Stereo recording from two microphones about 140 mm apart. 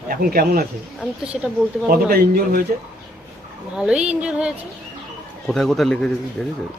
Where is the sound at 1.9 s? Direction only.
90° right.